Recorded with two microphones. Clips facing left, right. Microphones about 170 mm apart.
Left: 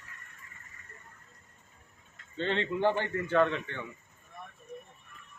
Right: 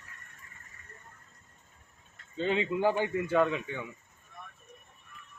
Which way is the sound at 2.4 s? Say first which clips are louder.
Right 1 dB; 10° right (ahead or behind).